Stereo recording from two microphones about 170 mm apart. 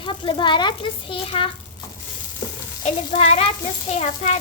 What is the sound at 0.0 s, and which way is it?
A child's voice, 30° left (ahead or behind).